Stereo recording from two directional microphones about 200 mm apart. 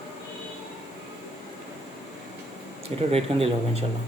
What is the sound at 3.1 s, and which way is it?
Speech, 30° right (ahead or behind).